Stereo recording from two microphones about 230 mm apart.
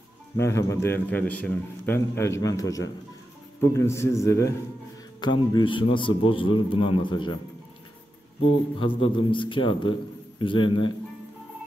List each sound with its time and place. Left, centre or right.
0.4 s a man's voice: centre
8.7 s a man's voice: left